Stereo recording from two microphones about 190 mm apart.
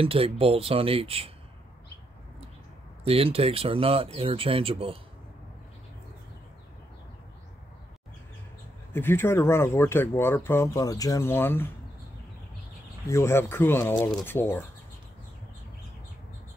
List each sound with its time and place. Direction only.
0.0 s speech: 30° right (ahead or behind)
3.0 s speech: 30° right (ahead or behind)
8.9 s speech: 10° left (ahead or behind)
13.1 s speech: 15° left (ahead or behind)